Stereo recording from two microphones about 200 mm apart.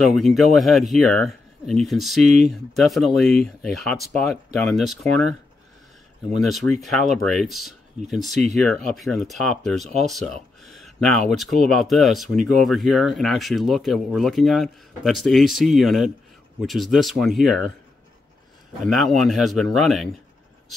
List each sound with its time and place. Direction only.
0.0 s speech: centre (ahead or behind)
6.4 s speech: centre (ahead or behind)
18.9 s speech: centre (ahead or behind)